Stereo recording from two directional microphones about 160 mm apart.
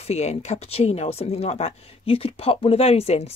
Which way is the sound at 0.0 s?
40° left (ahead or behind).